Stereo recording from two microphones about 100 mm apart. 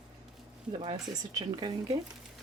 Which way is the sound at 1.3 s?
40° right (ahead or behind).